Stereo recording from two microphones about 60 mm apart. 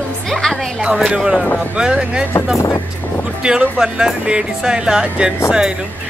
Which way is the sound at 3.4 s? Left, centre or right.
Centre.